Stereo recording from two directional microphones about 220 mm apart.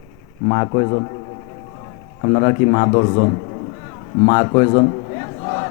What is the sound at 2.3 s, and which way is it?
Speech, 25° left (ahead or behind).